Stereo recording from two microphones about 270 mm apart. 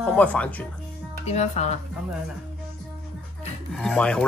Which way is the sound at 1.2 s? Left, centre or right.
Left.